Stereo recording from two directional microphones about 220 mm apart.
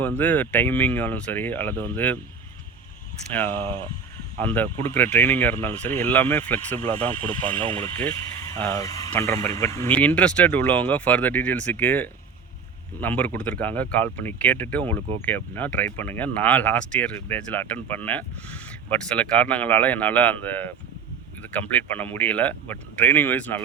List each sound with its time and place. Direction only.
0.2 s speech: 10° left (ahead or behind)
3.6 s speech: 25° right (ahead or behind)
4.4 s speech: 10° left (ahead or behind)
7.6 s speech: 25° right (ahead or behind)
7.9 s speech: 10° left (ahead or behind)